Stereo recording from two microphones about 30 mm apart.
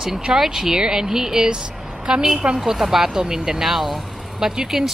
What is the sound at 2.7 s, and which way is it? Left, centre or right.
Speech, centre.